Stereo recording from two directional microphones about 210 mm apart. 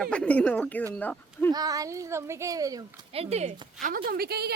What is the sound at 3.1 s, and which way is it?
Speech, 30° right (ahead or behind).